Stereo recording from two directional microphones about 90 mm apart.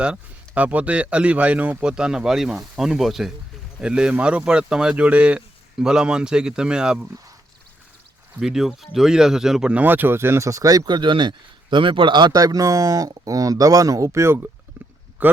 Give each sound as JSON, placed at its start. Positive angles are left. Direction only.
{"t": 0.0, "sound": "speech", "side_deg": -15}
{"t": 8.4, "sound": "speech", "side_deg": -5}
{"t": 9.8, "sound": "speech", "side_deg": -20}